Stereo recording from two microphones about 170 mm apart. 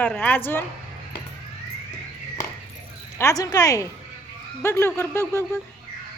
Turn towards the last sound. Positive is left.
turn(degrees=15)  # may be behind; listen again after turning